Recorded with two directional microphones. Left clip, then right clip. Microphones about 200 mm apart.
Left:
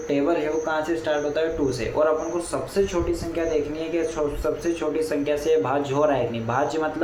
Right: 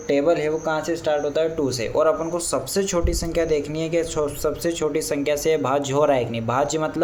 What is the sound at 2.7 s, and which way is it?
Speech, 60° right (ahead or behind).